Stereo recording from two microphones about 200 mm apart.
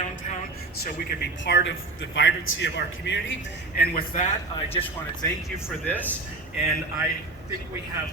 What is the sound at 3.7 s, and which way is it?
Speech, 45° left (ahead or behind).